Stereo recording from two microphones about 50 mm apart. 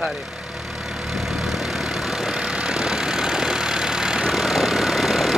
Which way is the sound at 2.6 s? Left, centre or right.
Centre.